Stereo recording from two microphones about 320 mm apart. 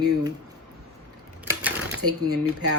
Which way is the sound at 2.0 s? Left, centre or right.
Right.